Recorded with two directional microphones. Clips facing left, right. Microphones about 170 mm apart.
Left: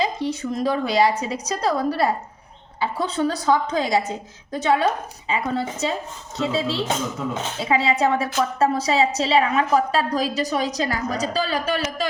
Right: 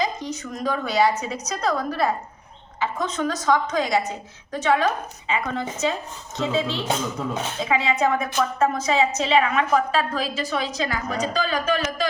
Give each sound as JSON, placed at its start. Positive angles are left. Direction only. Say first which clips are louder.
{"t": 0.0, "sound": "a woman's voice", "louder": "left 3 dB", "side_deg": 30}